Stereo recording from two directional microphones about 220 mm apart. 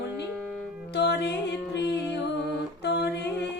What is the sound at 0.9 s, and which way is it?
Music, 50° left (ahead or behind).